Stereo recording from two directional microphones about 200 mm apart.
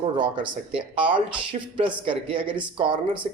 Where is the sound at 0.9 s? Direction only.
25° right (ahead or behind).